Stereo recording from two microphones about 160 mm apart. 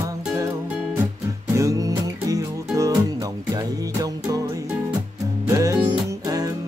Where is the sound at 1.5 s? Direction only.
20° right (ahead or behind).